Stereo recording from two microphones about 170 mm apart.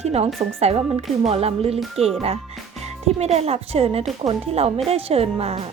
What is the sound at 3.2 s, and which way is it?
Speech, 40° right (ahead or behind).